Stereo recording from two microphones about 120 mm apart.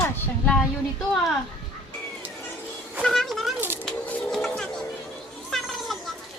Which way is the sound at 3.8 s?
15° left (ahead or behind).